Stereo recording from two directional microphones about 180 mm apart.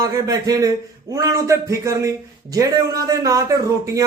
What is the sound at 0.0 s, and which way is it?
A man's voice, 20° right (ahead or behind).